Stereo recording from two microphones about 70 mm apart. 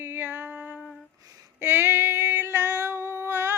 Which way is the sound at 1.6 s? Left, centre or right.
Right.